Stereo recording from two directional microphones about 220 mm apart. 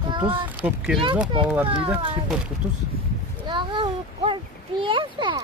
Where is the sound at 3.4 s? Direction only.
20° right (ahead or behind).